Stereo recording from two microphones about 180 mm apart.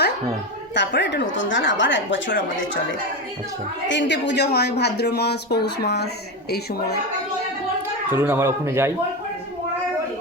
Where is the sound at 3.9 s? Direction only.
85° left; by 7.0 s 65° left (ahead or behind).